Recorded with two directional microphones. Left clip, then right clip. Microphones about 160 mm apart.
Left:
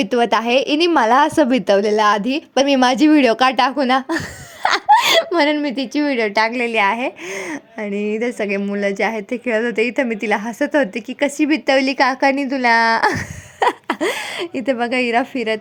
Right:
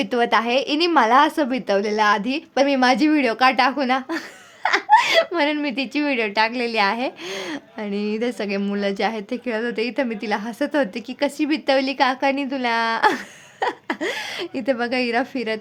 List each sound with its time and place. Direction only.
0.0 s a woman's voice: 25° left (ahead or behind)
4.6 s laughter: 60° left (ahead or behind)
5.3 s a woman's voice: 30° left (ahead or behind)
6.6 s a woman's voice: 10° left (ahead or behind)